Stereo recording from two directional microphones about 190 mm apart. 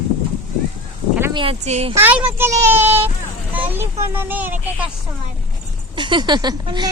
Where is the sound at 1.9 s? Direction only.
10° right (ahead or behind).